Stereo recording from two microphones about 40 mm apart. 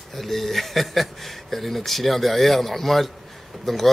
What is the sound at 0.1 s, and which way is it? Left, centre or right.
Speech, centre.